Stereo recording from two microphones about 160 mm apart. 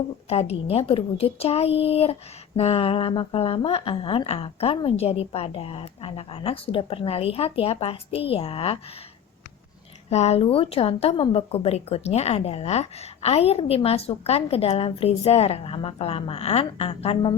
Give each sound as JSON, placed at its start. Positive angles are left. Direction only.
{"t": 0.3, "sound": "a woman's voice", "side_deg": 40}
{"t": 10.1, "sound": "a woman's voice", "side_deg": 45}